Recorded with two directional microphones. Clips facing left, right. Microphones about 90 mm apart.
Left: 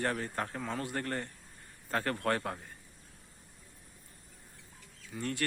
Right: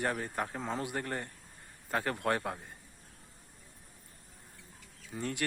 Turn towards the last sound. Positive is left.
turn(degrees=-15)  # may be behind; listen again after turning